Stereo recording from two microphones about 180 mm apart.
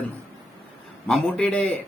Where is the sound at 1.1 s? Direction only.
5° left (ahead or behind).